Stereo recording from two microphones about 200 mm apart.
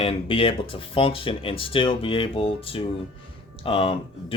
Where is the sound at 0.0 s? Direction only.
30° left (ahead or behind).